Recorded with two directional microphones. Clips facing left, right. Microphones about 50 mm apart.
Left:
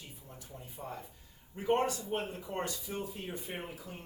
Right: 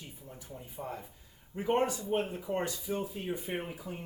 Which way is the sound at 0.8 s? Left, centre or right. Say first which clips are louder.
Right 3 dB; right.